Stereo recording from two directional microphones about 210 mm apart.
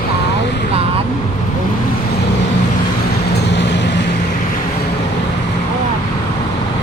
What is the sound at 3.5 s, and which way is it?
Vehicle, 55° left (ahead or behind).